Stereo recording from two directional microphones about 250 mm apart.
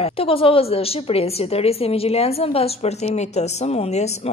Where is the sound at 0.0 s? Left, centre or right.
Left.